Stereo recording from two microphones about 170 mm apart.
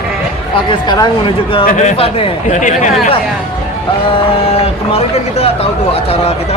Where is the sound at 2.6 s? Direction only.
45° left (ahead or behind).